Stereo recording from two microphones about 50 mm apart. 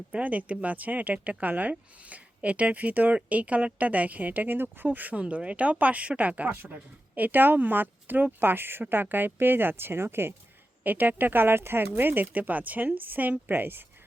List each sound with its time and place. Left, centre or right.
0.1 s speech: right
5.2 s speech: right
10.8 s speech: right